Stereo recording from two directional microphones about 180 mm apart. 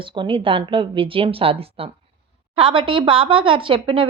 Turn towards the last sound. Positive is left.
turn(degrees=-30)  # may be behind; listen again after turning